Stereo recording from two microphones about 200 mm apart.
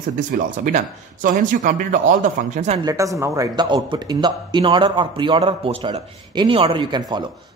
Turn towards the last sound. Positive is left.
turn(degrees=-25)  # may be behind; listen again after turning